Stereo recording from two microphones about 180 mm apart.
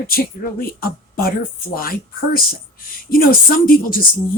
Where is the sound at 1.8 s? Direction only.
55° left (ahead or behind).